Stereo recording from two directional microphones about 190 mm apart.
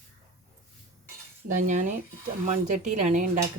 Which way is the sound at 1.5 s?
40° right (ahead or behind).